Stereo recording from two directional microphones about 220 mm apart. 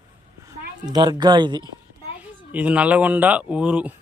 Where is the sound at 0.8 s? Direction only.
20° right (ahead or behind).